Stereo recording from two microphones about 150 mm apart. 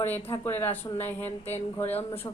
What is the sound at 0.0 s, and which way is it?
Speech, 15° left (ahead or behind).